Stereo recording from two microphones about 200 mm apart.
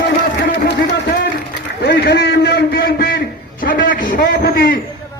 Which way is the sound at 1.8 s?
50° left (ahead or behind).